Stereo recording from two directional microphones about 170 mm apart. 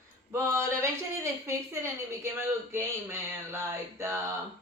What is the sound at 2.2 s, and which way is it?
Speech, 15° right (ahead or behind).